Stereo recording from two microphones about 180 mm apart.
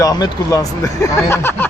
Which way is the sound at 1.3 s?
15° left (ahead or behind).